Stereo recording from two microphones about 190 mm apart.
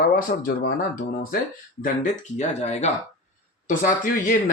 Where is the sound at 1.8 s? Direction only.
40° left (ahead or behind).